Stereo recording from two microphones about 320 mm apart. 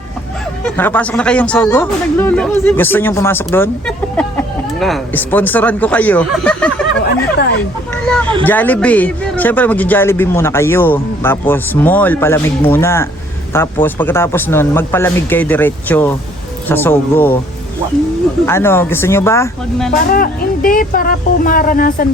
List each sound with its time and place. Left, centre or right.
0.6 s speech: centre
8.0 s speech: centre
18.4 s speech: centre
20.1 s speech: left